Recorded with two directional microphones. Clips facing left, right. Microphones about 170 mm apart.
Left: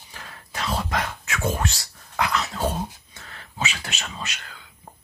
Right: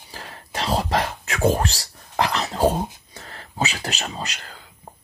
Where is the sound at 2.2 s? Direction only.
35° right (ahead or behind).